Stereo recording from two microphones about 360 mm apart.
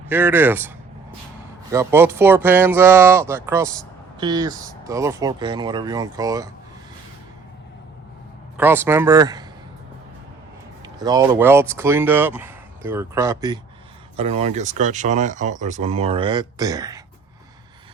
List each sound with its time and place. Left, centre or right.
0.1 s speech: centre
1.7 s speech: centre
8.5 s speech: centre
10.8 s speech: centre